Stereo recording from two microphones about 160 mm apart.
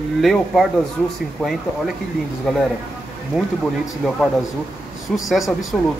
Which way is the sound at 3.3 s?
Centre (ahead or behind).